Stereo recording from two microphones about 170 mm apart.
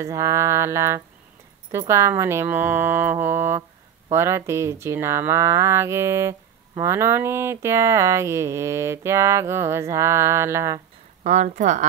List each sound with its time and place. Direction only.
0.0 s speech: 15° right (ahead or behind)
11.2 s a woman's voice: 45° right (ahead or behind)